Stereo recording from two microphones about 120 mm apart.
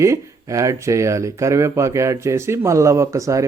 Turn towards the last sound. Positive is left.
turn(degrees=-25)  # may be behind; listen again after turning